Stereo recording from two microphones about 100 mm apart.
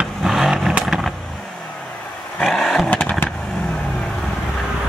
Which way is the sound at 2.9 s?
15° left (ahead or behind).